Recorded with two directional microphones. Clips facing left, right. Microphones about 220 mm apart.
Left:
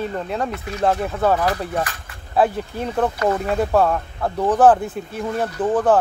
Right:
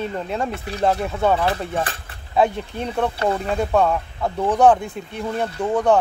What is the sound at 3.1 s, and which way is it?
Speech, 30° right (ahead or behind).